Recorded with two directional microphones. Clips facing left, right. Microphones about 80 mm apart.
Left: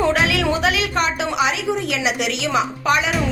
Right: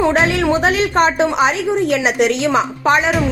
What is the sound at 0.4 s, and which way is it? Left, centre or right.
A woman's voice, right.